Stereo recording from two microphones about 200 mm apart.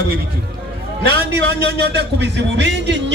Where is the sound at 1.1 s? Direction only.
55° right (ahead or behind).